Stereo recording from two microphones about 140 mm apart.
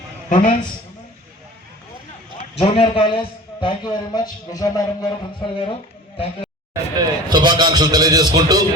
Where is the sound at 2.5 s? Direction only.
45° left (ahead or behind); by 4.8 s 25° left (ahead or behind).